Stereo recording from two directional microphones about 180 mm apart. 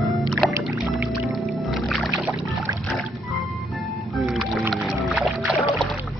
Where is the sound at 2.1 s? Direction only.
10° right (ahead or behind).